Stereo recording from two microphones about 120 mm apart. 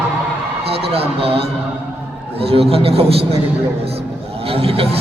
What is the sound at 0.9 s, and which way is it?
Speech, 55° right (ahead or behind).